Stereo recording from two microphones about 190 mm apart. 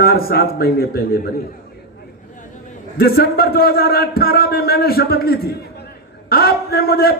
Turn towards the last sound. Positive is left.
turn(degrees=50)  # may be behind; listen again after turning